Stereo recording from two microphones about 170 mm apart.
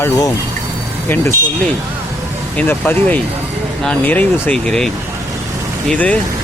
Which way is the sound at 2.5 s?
10° left (ahead or behind).